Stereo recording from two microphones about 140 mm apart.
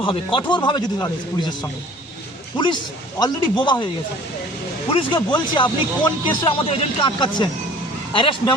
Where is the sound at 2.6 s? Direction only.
35° left (ahead or behind).